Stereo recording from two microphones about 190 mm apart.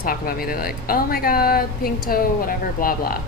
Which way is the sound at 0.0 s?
50° left (ahead or behind).